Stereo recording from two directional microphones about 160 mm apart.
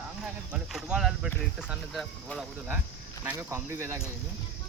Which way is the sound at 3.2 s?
15° right (ahead or behind).